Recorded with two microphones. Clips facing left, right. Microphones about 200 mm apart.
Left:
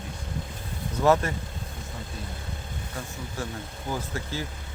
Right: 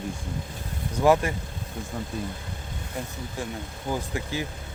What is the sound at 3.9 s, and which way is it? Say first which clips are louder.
Speech: right 3 dB; 15° right (ahead or behind).